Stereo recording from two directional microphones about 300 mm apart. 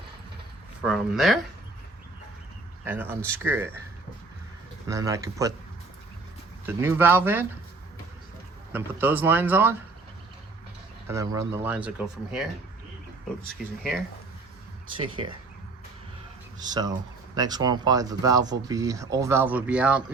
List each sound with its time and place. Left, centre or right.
0.8 s speech: centre
2.8 s speech: centre
4.9 s speech: centre
6.7 s speech: centre
8.7 s speech: centre
11.1 s speech: centre
14.9 s speech: centre
16.6 s speech: centre